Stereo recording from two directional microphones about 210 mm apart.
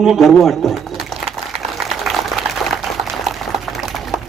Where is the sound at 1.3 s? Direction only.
30° right (ahead or behind).